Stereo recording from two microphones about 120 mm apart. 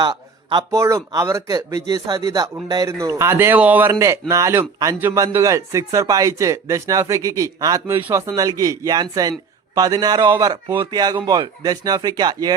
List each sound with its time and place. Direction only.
0.0 s a man's voice: 35° right (ahead or behind)
0.8 s speech: 25° right (ahead or behind)
7.9 s speech: 20° right (ahead or behind)
8.3 s speech: 30° right (ahead or behind)